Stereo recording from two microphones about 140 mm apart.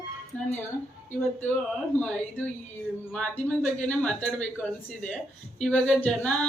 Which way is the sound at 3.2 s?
5° left (ahead or behind).